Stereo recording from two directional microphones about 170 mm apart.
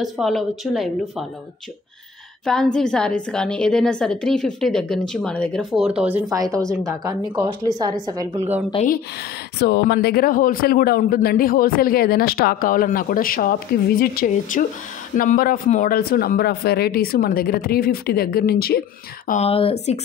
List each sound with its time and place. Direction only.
0.0 s a woman's voice: centre (ahead or behind)
2.4 s a woman's voice: 5° left (ahead or behind)
6.8 s speech: 20° right (ahead or behind)
8.7 s speech: 35° left (ahead or behind)
9.6 s speech: 70° left (ahead or behind); by 16.0 s 50° left (ahead or behind)
16.0 s speech: 65° left (ahead or behind)
19.2 s speech: 40° left (ahead or behind)